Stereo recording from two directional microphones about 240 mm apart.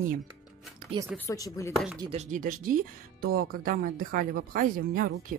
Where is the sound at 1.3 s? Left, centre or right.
Centre.